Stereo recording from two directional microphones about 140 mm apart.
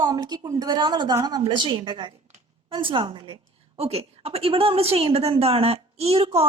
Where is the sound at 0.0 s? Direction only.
25° right (ahead or behind).